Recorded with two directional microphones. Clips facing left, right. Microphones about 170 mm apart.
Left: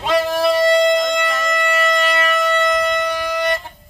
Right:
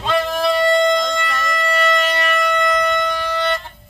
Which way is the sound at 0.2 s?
35° left (ahead or behind).